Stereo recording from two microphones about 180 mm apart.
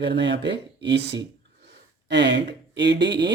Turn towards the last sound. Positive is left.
turn(degrees=-75)  # may be behind; listen again after turning